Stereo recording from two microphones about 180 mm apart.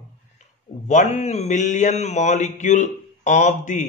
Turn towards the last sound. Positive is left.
turn(degrees=45)  # may be behind; listen again after turning